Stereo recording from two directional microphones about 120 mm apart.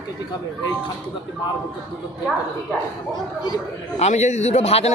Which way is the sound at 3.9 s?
70° left (ahead or behind).